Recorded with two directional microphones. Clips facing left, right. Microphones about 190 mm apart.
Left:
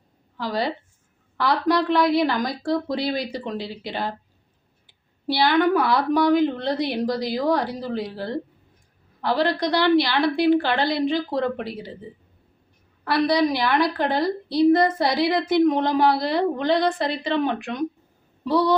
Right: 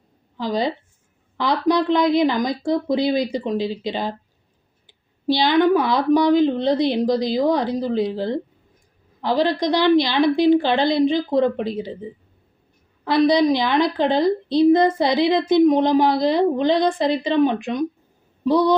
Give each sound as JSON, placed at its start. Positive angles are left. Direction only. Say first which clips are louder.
{"t": 0.3, "sound": "a woman's voice", "louder": "right 3 dB", "side_deg": -20}
{"t": 13.1, "sound": "a woman's voice", "louder": "right 4 dB", "side_deg": -20}